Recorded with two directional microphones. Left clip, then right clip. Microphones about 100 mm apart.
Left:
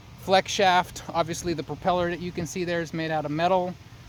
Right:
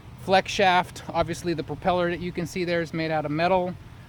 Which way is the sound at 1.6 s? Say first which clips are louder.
Right 1 dB; 50° left (ahead or behind).